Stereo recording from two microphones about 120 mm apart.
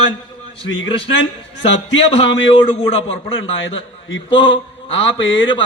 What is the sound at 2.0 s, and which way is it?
A man's voice, 50° left (ahead or behind).